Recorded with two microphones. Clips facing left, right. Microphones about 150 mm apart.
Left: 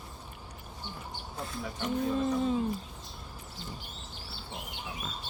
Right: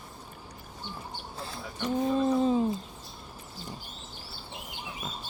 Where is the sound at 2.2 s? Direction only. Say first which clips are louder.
Right 4 dB; 30° right (ahead or behind).